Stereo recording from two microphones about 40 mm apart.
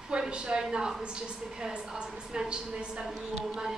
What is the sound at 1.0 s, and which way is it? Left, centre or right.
A woman's voice, right.